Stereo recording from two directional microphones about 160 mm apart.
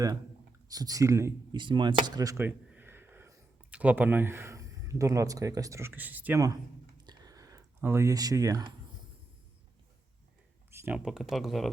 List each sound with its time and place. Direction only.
0.7 s speech: 25° right (ahead or behind)
1.5 s speech: 30° right (ahead or behind)
2.4 s a sound: 15° right (ahead or behind)
3.7 s speech: 10° right (ahead or behind)
7.0 s a sound: 25° right (ahead or behind)
10.7 s speech: 15° right (ahead or behind)